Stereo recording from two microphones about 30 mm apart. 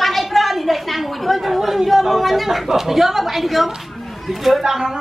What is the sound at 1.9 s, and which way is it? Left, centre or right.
A woman's voice, centre.